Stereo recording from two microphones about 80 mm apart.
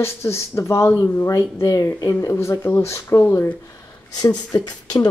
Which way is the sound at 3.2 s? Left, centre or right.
Left.